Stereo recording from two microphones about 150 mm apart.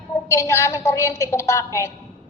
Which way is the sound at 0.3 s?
20° left (ahead or behind).